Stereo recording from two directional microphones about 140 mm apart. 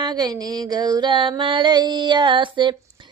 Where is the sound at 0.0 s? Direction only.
30° right (ahead or behind).